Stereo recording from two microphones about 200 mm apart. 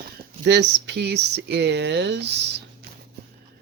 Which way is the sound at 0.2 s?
60° right (ahead or behind).